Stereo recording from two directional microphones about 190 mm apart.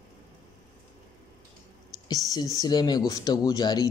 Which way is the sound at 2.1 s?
20° left (ahead or behind).